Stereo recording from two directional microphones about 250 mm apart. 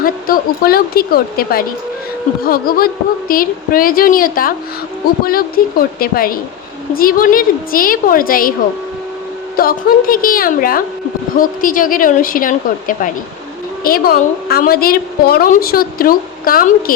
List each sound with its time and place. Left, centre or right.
0.0 s a woman's voice: left
9.6 s a woman's voice: left